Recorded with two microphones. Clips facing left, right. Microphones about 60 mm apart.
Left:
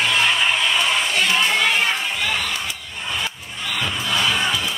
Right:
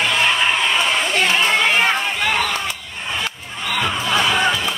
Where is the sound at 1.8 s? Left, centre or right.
Right.